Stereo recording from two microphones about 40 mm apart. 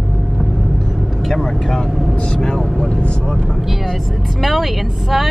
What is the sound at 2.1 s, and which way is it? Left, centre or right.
Vehicle, left.